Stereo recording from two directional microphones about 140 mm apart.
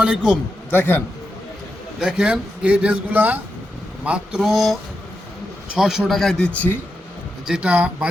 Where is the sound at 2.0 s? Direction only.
5° right (ahead or behind).